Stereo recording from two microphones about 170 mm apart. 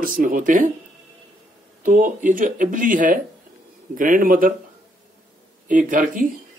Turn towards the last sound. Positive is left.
turn(degrees=-55)  # may be behind; listen again after turning